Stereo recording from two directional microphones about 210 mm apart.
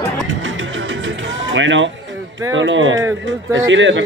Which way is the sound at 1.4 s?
60° right (ahead or behind).